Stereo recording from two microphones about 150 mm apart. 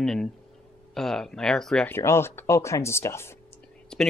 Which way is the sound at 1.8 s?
15° left (ahead or behind).